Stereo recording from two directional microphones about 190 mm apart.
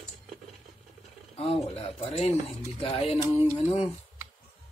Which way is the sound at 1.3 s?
30° left (ahead or behind).